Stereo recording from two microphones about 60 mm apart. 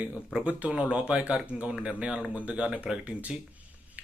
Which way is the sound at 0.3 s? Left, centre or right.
Centre.